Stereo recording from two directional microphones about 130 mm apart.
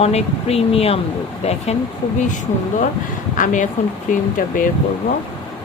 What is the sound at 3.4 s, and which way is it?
Speech, 80° left.